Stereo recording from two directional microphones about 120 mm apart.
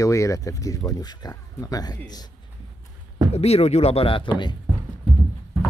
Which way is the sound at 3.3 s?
60° left (ahead or behind).